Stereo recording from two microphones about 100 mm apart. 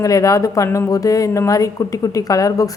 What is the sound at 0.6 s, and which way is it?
Speech, 20° left (ahead or behind).